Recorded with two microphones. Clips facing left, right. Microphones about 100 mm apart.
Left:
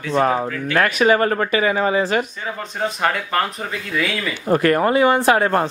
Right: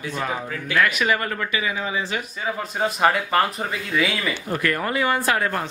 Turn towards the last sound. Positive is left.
turn(degrees=25)  # may be behind; listen again after turning